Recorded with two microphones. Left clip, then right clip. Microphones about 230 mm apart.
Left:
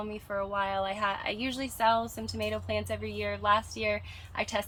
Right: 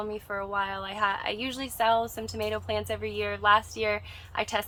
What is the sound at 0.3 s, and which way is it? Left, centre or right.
Speech, centre.